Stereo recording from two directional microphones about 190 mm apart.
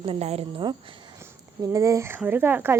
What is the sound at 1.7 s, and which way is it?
Speech, 15° right (ahead or behind).